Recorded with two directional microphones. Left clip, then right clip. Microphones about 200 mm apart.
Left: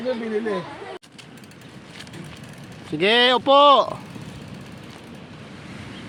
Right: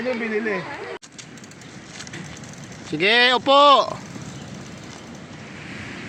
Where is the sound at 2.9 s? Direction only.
10° left (ahead or behind).